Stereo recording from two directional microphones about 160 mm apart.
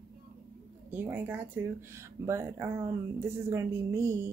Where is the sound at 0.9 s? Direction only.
10° right (ahead or behind).